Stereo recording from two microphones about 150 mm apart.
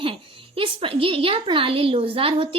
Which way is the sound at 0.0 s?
35° right (ahead or behind).